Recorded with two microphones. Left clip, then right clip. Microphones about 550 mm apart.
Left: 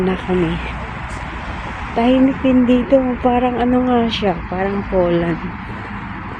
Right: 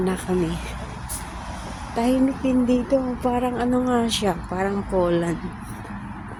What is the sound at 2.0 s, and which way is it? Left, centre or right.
A woman's voice, right.